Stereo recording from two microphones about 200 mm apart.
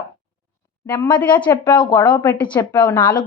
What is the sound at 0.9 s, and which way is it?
Speech, 25° left (ahead or behind).